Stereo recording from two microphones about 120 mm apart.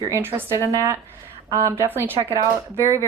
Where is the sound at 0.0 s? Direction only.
20° right (ahead or behind).